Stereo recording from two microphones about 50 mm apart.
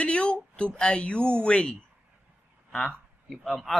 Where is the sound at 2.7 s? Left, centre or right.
Left.